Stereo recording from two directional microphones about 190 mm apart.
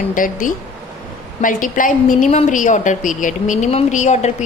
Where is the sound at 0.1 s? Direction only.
45° left (ahead or behind).